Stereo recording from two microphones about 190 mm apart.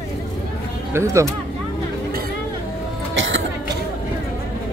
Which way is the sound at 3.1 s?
80° right.